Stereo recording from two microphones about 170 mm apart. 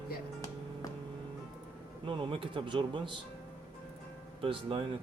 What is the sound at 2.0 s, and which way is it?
Speech, 30° right (ahead or behind).